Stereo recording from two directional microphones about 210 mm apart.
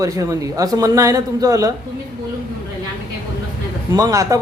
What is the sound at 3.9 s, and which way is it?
Speech, 15° right (ahead or behind).